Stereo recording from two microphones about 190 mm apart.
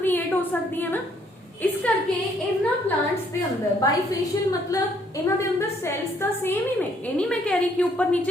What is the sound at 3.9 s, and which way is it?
Speech, 20° left (ahead or behind).